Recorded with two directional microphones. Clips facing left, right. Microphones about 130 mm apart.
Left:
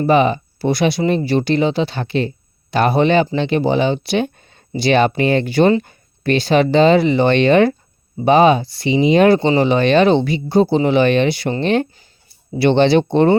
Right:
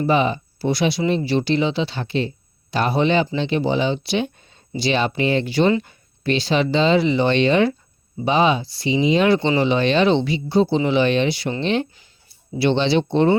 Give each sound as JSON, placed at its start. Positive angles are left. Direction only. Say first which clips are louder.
{"t": 0.0, "sound": "speech", "louder": "left 5 dB", "side_deg": 55}